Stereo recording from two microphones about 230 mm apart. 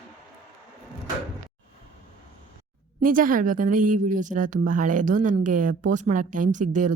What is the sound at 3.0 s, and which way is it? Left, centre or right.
A woman's voice, right.